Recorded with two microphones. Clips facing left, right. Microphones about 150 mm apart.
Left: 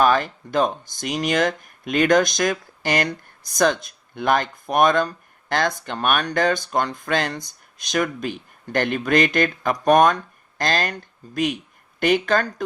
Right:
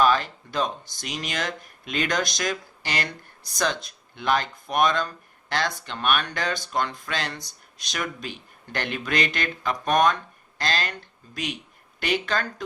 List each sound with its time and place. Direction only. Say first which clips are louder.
0.0 s speech: left 3 dB; 50° left (ahead or behind)
11.9 s speech: left 7 dB; 45° left (ahead or behind)